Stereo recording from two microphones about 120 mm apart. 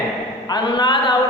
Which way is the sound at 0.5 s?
40° left (ahead or behind).